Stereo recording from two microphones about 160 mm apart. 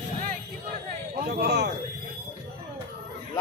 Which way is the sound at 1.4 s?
90° right.